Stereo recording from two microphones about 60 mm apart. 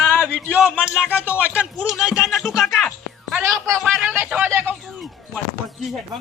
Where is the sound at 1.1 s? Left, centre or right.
Right.